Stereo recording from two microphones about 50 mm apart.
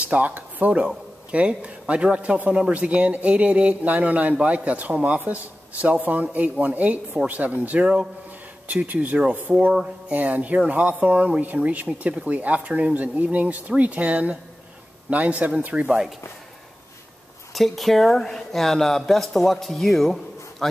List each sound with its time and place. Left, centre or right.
0.0 s speech: right
9.5 s speech: centre
10.0 s speech: right
17.6 s speech: centre